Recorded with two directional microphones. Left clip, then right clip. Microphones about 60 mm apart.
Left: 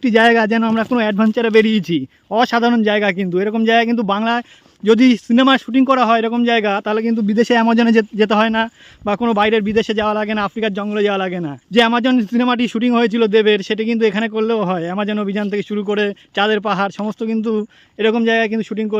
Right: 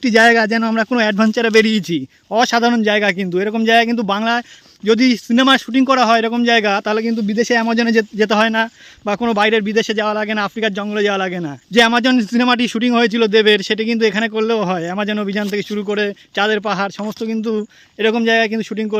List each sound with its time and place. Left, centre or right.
0.0 s a man's voice: left
0.3 s speech: left
0.9 s a man's voice: left
5.3 s speech: left
5.7 s a man's voice: left
6.7 s a man's voice: centre
7.3 s speech: left
8.3 s a man's voice: left
10.2 s speech: left
11.7 s a man's voice: centre
12.5 s a man's voice: centre
13.7 s a man's voice: centre
14.0 s a man's voice: left
15.9 s speech: left